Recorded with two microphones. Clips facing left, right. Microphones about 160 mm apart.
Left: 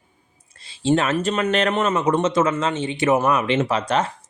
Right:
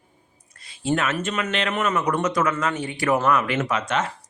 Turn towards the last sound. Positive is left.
turn(degrees=35)  # may be behind; listen again after turning